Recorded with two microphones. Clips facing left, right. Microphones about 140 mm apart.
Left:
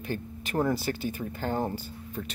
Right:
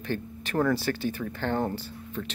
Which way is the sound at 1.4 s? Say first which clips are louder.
Right 2 dB; 10° left (ahead or behind).